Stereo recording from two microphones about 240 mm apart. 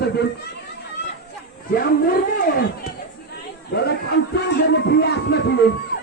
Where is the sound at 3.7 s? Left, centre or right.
Left.